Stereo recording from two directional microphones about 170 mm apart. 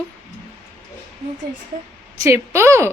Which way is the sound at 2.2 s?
15° right (ahead or behind).